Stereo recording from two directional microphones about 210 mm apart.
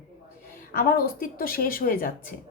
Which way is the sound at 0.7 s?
45° left (ahead or behind).